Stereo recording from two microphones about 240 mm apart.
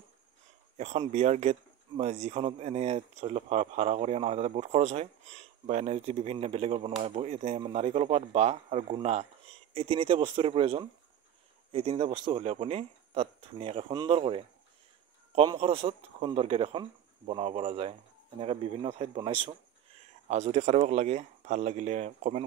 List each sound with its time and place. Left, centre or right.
0.7 s speech: right